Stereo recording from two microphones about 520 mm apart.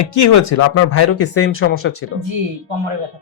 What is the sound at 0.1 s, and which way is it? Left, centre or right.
Speech, left.